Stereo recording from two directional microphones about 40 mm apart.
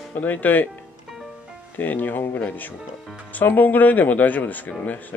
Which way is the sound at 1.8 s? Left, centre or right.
Left.